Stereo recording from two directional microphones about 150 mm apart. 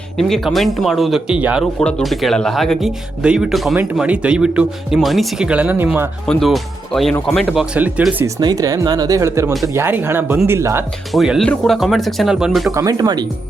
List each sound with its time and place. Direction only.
0.2 s speech: centre (ahead or behind)
1.8 s speech: 5° left (ahead or behind); by 6.1 s 15° right (ahead or behind)
6.2 s speech: centre (ahead or behind)
8.4 s speech: 25° right (ahead or behind)
11.1 s speech: centre (ahead or behind)
12.7 s speech: 25° right (ahead or behind)